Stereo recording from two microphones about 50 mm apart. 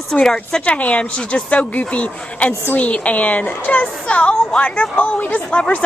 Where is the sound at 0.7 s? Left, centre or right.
Left.